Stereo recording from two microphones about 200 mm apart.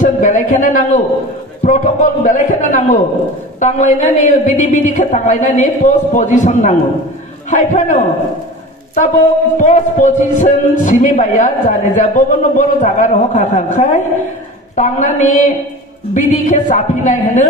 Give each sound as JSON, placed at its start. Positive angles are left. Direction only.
{"t": 0.0, "sound": "a man's voice", "side_deg": 40}
{"t": 9.6, "sound": "a man's voice", "side_deg": 40}